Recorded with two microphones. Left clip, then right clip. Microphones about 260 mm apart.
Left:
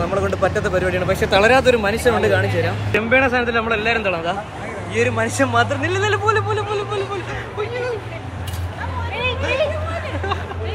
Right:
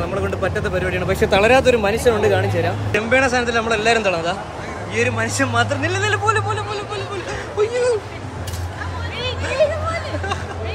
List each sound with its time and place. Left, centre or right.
0.1 s a man's voice: centre
1.1 s speech: centre
1.4 s speech: centre